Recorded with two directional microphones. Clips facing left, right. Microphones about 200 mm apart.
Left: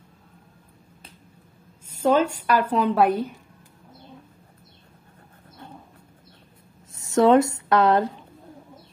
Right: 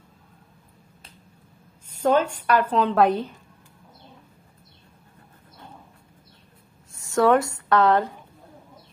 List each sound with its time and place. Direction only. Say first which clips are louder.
2.0 s a woman's voice: left 1 dB; 10° left (ahead or behind)
7.0 s speech: left 3 dB; 20° left (ahead or behind)